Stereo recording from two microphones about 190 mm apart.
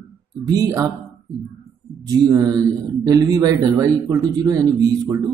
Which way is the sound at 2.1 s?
20° right (ahead or behind).